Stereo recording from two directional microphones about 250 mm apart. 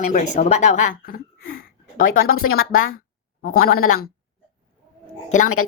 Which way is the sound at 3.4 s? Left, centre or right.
Left.